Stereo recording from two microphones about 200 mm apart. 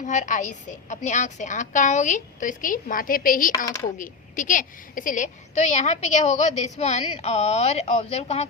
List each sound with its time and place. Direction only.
0.0 s speech: 40° left (ahead or behind)